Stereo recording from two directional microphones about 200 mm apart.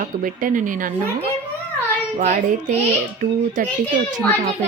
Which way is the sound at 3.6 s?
40° right (ahead or behind).